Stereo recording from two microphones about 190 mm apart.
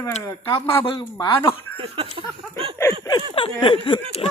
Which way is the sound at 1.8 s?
30° right (ahead or behind).